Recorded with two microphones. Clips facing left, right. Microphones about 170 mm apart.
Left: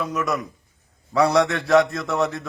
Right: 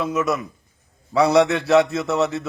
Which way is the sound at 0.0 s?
Centre (ahead or behind).